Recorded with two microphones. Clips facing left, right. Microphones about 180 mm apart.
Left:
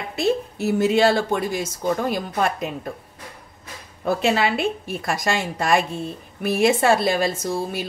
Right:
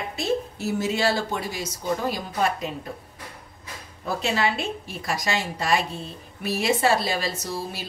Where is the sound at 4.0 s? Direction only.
60° left (ahead or behind).